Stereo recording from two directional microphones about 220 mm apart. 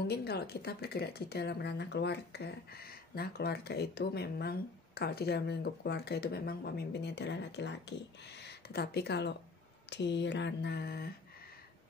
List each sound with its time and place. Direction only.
0.0 s a woman's voice: 45° left (ahead or behind)